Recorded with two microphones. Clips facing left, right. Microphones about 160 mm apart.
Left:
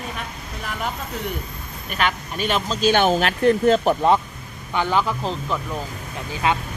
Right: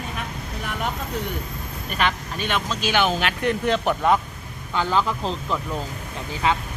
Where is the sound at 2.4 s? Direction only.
30° left (ahead or behind).